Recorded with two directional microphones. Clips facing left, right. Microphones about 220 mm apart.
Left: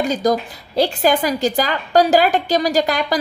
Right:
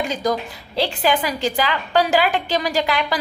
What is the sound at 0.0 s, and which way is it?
A woman's voice, 40° left (ahead or behind).